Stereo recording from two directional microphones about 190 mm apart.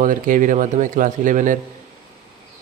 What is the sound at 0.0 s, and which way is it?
Speech, 45° right (ahead or behind).